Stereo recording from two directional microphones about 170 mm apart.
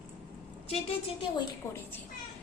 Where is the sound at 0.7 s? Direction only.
35° left (ahead or behind).